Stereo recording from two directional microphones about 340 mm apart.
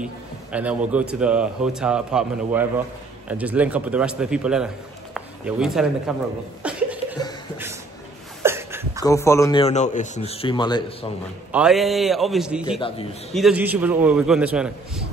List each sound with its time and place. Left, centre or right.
0.0 s a man's voice: centre
6.6 s laughter: centre
8.4 s a sound: centre
9.0 s speech: centre
11.5 s a man's voice: centre
12.8 s speech: centre
13.3 s a man's voice: centre